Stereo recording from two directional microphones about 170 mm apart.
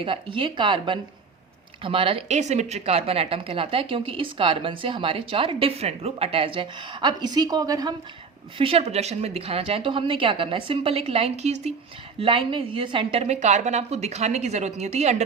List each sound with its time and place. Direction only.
0.0 s speech: 30° right (ahead or behind)
8.5 s speech: 35° right (ahead or behind)